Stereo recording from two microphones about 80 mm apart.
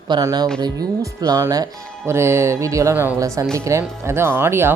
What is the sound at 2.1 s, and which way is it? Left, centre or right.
Speech, right.